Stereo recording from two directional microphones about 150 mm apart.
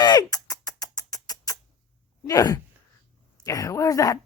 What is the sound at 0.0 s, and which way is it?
Rodents, 25° left (ahead or behind).